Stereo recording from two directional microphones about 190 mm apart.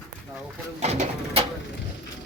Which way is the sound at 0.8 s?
35° right (ahead or behind).